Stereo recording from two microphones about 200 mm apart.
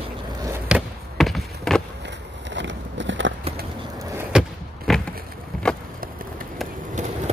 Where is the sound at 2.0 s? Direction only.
65° right (ahead or behind).